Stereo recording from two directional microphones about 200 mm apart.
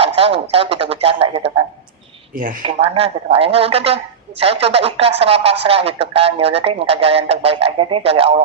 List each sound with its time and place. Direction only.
0.0 s a woman's voice: 30° right (ahead or behind)
2.3 s speech: 45° right (ahead or behind)
2.6 s a woman's voice: 30° right (ahead or behind)